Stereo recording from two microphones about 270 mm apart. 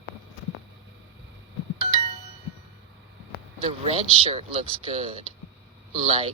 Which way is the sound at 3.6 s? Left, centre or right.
Right.